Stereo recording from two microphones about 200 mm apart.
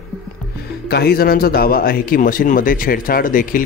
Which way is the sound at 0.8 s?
55° left (ahead or behind).